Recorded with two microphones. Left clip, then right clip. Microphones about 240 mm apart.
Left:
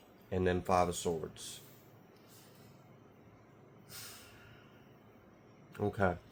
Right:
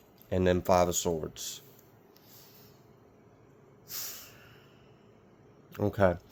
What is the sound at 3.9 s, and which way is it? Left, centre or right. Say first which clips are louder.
Snort: right 8 dB; right.